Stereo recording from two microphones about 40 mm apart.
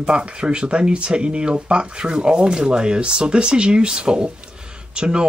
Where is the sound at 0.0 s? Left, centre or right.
Right.